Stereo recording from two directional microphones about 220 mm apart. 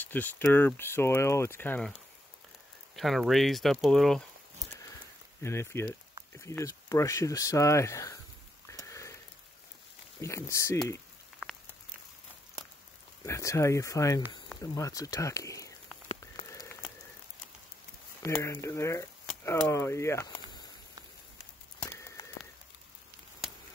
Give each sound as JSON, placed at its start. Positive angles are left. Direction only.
{"t": 0.0, "sound": "speech", "side_deg": 10}
{"t": 3.0, "sound": "speech", "side_deg": 0}
{"t": 5.4, "sound": "speech", "side_deg": 10}
{"t": 8.6, "sound": "sniff", "side_deg": 15}
{"t": 10.2, "sound": "speech", "side_deg": 15}
{"t": 13.2, "sound": "speech", "side_deg": 15}
{"t": 16.2, "sound": "rain on surface", "side_deg": 15}
{"t": 18.2, "sound": "speech", "side_deg": 10}
{"t": 21.9, "sound": "rain on surface", "side_deg": 15}